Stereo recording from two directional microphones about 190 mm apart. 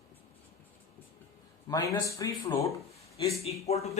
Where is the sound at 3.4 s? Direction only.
35° left (ahead or behind).